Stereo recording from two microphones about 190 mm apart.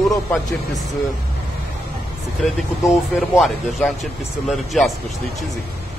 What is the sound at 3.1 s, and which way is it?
Speech, centre (ahead or behind).